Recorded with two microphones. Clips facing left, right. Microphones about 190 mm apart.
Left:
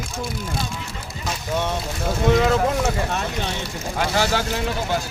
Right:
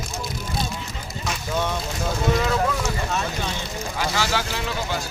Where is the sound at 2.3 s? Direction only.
55° left (ahead or behind).